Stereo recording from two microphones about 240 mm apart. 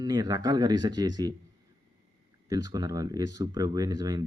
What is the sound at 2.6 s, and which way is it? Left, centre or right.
Speech, centre.